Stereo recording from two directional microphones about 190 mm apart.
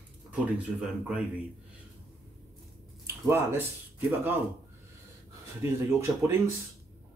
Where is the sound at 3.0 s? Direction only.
10° right (ahead or behind).